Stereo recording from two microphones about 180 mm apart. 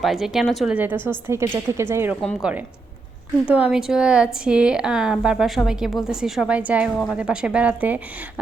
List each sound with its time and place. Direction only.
0.0 s a woman's voice: centre (ahead or behind)